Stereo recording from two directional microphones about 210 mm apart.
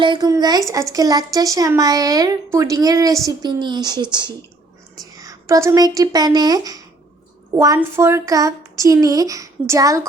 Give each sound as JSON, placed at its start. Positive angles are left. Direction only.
{"t": 0.0, "sound": "a woman's voice", "side_deg": -20}